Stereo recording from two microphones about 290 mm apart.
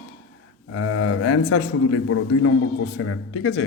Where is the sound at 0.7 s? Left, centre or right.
Left.